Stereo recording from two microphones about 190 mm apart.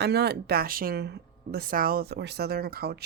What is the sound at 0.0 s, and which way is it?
A woman's voice, 60° right (ahead or behind).